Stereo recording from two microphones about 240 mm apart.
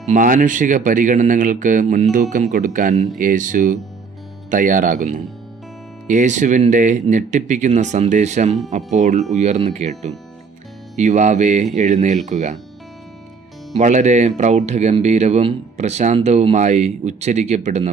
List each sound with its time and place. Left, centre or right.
0.1 s speech: right
10.9 s speech: right
13.7 s speech: right